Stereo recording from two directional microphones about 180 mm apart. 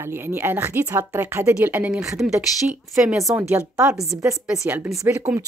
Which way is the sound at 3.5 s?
15° right (ahead or behind).